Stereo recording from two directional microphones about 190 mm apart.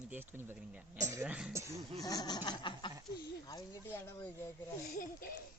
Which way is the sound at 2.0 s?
20° left (ahead or behind).